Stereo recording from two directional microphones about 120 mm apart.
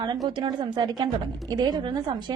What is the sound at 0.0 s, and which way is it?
A woman's voice, 35° right (ahead or behind).